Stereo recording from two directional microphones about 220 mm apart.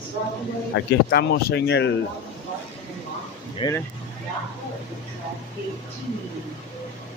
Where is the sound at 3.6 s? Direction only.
15° left (ahead or behind).